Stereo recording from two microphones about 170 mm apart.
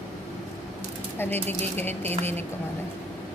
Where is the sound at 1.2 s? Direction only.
10° left (ahead or behind).